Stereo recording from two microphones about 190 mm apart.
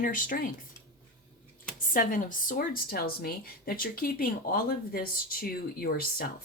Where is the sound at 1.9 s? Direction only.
45° left (ahead or behind).